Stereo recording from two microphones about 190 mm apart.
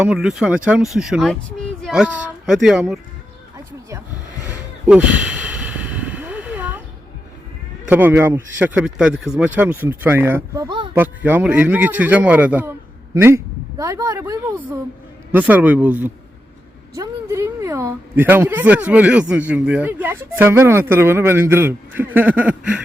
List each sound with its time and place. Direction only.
0.0 s speech: 5° right (ahead or behind)
4.9 s a sound: 5° right (ahead or behind)
7.9 s speech: 10° right (ahead or behind)
10.9 s speech: 10° right (ahead or behind)